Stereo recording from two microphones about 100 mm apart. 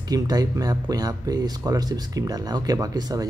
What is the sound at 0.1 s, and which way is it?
Speech, 40° right (ahead or behind).